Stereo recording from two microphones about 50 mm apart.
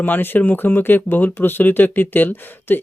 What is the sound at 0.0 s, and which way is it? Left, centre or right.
Speech, left.